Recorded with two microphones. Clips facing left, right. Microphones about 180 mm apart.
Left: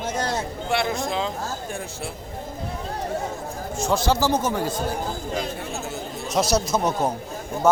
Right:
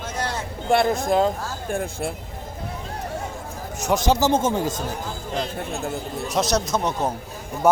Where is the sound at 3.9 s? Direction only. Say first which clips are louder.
Right 2 dB; 20° right (ahead or behind).